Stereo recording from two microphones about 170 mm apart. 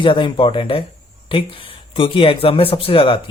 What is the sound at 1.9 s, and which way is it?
Speech, 30° left (ahead or behind).